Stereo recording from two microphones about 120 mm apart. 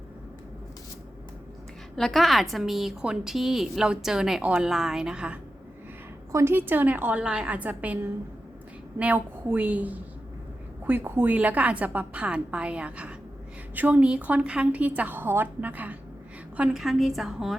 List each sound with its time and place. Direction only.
2.0 s a woman's voice: centre (ahead or behind)
6.3 s a woman's voice: 20° right (ahead or behind); by 17.6 s centre (ahead or behind)